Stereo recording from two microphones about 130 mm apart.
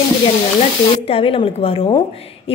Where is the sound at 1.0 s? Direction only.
45° left (ahead or behind).